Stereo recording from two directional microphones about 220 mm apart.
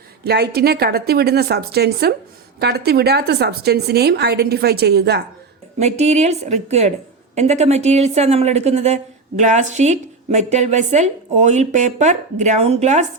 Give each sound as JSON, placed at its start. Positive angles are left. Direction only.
{"t": 0.3, "sound": "a woman's voice", "side_deg": -45}
{"t": 5.8, "sound": "a woman's voice", "side_deg": -30}